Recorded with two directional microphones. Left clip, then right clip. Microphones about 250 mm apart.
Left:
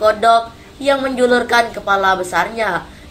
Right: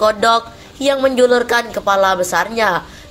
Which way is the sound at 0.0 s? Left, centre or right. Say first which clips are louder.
Left 1 dB; right.